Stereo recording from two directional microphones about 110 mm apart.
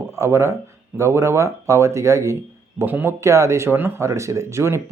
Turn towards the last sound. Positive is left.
turn(degrees=-25)  # may be behind; listen again after turning